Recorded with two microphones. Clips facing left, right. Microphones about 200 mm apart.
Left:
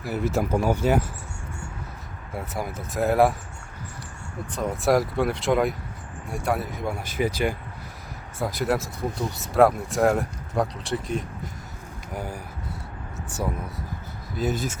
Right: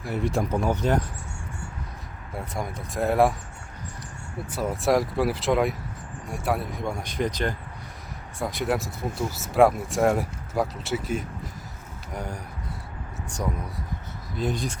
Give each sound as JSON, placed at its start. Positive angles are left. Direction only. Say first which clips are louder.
{"t": 0.0, "sound": "speech", "louder": "left 1 dB", "side_deg": 5}
{"t": 2.3, "sound": "speech", "louder": "left 1 dB", "side_deg": 5}
{"t": 4.5, "sound": "speech", "louder": "left 1 dB", "side_deg": 0}
{"t": 14.3, "sound": "speech", "louder": "left 2 dB", "side_deg": 5}